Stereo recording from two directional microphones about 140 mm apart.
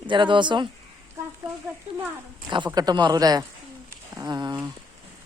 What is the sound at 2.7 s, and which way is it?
Speech, 30° right (ahead or behind).